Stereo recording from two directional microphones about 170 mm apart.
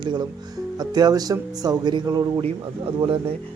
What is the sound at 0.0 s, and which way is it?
A man's voice, 25° right (ahead or behind).